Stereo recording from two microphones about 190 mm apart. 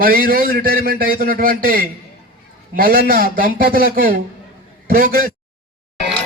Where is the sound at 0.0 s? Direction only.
50° right (ahead or behind).